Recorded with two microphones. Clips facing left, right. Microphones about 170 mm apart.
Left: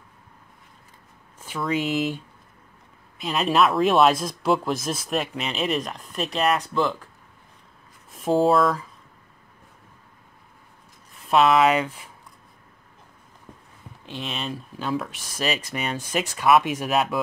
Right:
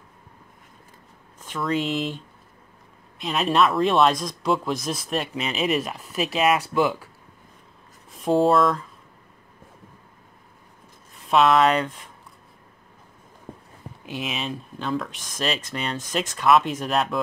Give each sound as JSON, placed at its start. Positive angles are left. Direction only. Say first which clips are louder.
{"t": 1.4, "sound": "speech", "louder": "even", "side_deg": 5}
{"t": 8.1, "sound": "speech", "louder": "even", "side_deg": 0}
{"t": 11.2, "sound": "speech", "louder": "even", "side_deg": 0}
{"t": 13.5, "sound": "a sound", "louder": "right 7 dB", "side_deg": -35}
{"t": 14.0, "sound": "speech", "louder": "right 2 dB", "side_deg": -5}